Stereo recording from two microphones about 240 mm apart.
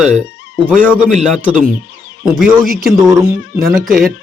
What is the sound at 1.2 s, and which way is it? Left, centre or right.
Speech, centre.